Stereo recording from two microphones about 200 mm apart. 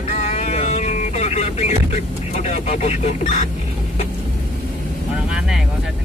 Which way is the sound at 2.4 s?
30° left (ahead or behind).